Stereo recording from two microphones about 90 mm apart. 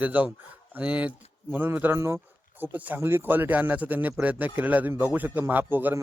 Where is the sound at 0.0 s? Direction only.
20° right (ahead or behind).